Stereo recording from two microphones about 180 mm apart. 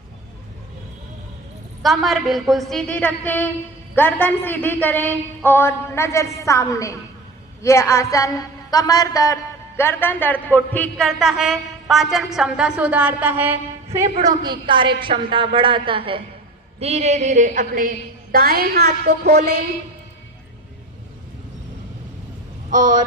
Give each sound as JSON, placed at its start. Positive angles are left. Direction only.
{"t": 1.8, "sound": "a man's voice", "side_deg": 0}
{"t": 14.3, "sound": "a woman's voice", "side_deg": -25}
{"t": 22.7, "sound": "a woman's voice", "side_deg": -45}